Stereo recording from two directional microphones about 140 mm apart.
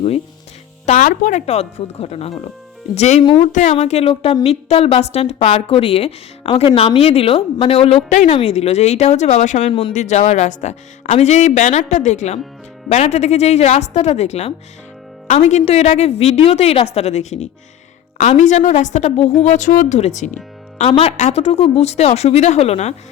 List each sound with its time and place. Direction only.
0.9 s speech: 65° left (ahead or behind); by 3.2 s 50° left (ahead or behind)
3.4 s a woman's voice: 60° left (ahead or behind)
19.4 s a woman's voice: 60° left (ahead or behind)
20.9 s speech: 45° left (ahead or behind)